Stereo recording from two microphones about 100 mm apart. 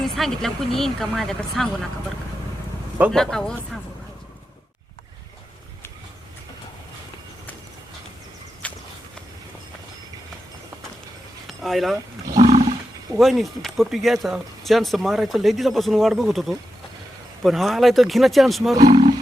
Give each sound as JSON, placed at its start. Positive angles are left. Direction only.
{"t": 0.2, "sound": "speech", "side_deg": 5}
{"t": 3.1, "sound": "speech", "side_deg": 5}
{"t": 8.6, "sound": "horse", "side_deg": 10}
{"t": 11.4, "sound": "a sound", "side_deg": 0}
{"t": 12.4, "sound": "roar", "side_deg": -60}
{"t": 13.1, "sound": "speech", "side_deg": 0}